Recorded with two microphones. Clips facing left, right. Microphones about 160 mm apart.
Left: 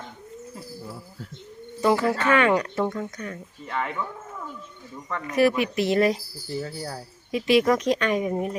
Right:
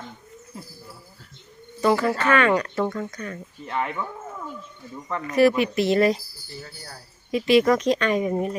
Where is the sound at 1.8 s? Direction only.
15° left (ahead or behind).